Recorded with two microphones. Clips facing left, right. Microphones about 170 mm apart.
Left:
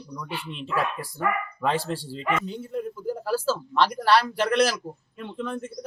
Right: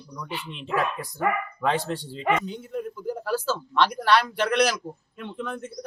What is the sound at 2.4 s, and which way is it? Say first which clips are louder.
Speech: left 1 dB; 30° left (ahead or behind).